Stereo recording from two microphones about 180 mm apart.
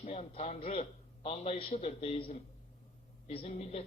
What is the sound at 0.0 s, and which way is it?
A man's voice, 35° left (ahead or behind).